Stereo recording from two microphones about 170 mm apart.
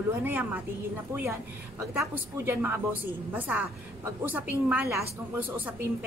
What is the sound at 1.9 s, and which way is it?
A woman's voice, 15° right (ahead or behind).